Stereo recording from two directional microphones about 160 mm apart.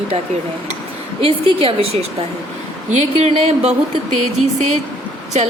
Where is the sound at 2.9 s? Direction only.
45° right (ahead or behind).